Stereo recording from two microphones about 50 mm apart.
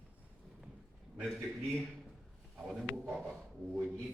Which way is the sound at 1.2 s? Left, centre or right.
Centre.